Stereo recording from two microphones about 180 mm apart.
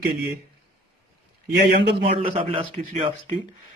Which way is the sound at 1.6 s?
65° right (ahead or behind).